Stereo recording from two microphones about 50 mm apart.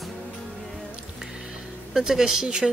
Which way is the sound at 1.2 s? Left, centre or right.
Centre.